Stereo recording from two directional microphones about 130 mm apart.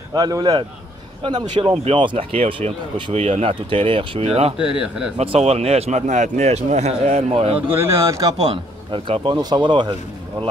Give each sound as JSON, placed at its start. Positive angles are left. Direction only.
{"t": 0.1, "sound": "speech", "side_deg": -30}
{"t": 4.6, "sound": "speech", "side_deg": -10}
{"t": 5.1, "sound": "speech", "side_deg": -50}
{"t": 7.8, "sound": "speech", "side_deg": -25}
{"t": 8.5, "sound": "speech", "side_deg": -40}